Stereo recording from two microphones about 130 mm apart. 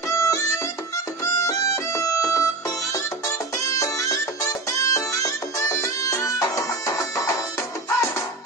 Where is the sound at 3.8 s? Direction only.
25° left (ahead or behind).